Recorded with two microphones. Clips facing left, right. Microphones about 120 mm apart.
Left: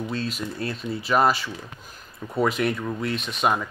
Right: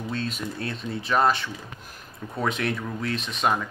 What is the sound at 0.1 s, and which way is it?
Speech, centre (ahead or behind).